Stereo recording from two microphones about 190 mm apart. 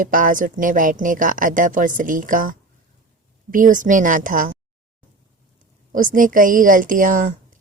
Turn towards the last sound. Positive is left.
turn(degrees=-45)  # may be behind; listen again after turning